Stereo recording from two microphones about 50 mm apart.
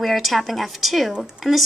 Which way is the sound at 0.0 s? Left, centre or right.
Centre.